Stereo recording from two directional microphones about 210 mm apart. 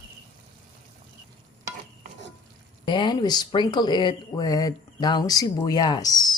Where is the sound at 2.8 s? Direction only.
20° left (ahead or behind).